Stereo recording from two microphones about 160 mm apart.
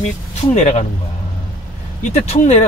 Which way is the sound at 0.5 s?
45° left (ahead or behind).